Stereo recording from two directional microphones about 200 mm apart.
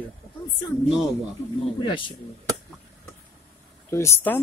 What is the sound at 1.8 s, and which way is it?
Speech, 25° left (ahead or behind).